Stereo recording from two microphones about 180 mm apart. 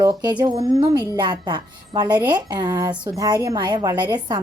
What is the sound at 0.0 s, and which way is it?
A woman's voice, 20° right (ahead or behind).